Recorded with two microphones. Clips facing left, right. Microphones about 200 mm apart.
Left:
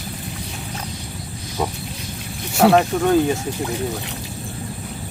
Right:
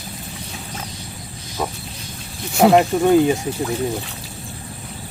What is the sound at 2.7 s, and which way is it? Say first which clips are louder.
Speech: right 2 dB; 15° right (ahead or behind).